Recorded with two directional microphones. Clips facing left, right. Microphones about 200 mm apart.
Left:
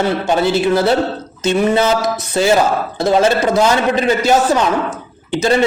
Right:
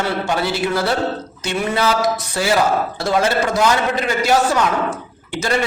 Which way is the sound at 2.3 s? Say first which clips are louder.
Left 5 dB; 25° left (ahead or behind).